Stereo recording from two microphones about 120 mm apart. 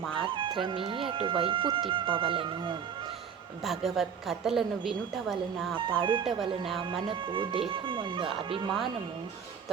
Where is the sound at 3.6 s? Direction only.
Centre (ahead or behind).